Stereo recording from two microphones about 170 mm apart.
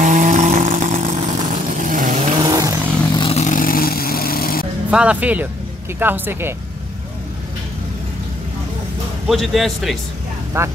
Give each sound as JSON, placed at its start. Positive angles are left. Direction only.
{"t": 0.0, "sound": "vehicle", "side_deg": -45}
{"t": 2.4, "sound": "vehicle", "side_deg": -20}
{"t": 3.2, "sound": "vehicle", "side_deg": 35}
{"t": 3.4, "sound": "vehicle", "side_deg": 55}
{"t": 4.9, "sound": "speech", "side_deg": -10}
{"t": 9.3, "sound": "speech", "side_deg": 0}
{"t": 10.6, "sound": "speech", "side_deg": -15}